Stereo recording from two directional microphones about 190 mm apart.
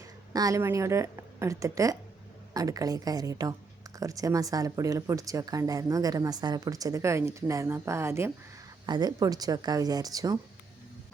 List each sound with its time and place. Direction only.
0.3 s speech: 15° right (ahead or behind)